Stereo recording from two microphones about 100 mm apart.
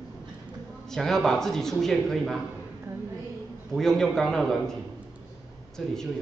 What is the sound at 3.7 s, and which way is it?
Speech, 5° left (ahead or behind).